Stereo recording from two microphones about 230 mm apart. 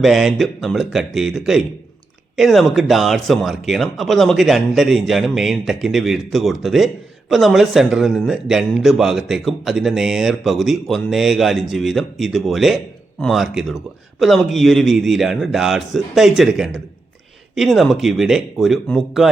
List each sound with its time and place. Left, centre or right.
0.0 s speech: centre